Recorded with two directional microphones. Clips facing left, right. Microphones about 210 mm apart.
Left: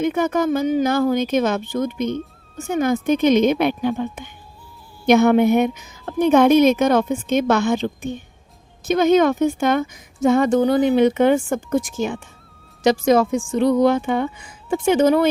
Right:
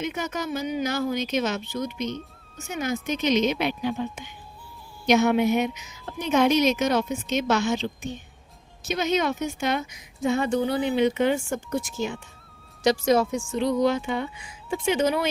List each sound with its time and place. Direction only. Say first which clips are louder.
0.0 s a woman's voice: left 10 dB; 55° left (ahead or behind)
11.4 s speech: left 7 dB; 90° left
13.3 s speech: left 7 dB; 55° left (ahead or behind)